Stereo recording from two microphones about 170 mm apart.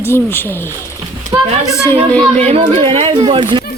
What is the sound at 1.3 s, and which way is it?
Speech, 10° right (ahead or behind).